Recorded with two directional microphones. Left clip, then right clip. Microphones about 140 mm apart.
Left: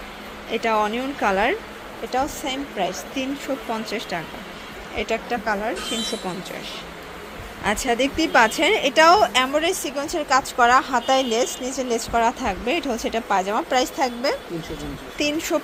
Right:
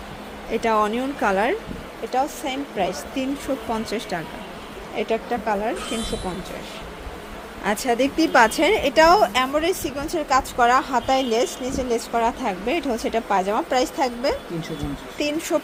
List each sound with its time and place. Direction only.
0.5 s a woman's voice: 15° right (ahead or behind)
4.9 s a woman's voice: 5° right (ahead or behind)
7.6 s a woman's voice: 10° right (ahead or behind)